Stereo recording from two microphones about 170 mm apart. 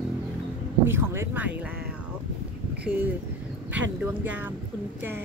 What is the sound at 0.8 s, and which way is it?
Speech, 15° right (ahead or behind).